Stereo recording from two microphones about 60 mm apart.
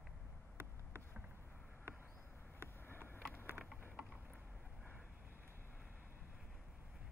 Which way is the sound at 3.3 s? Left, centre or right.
Left.